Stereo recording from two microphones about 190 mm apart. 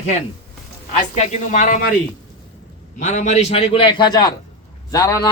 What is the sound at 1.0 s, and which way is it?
Speech, 35° left (ahead or behind).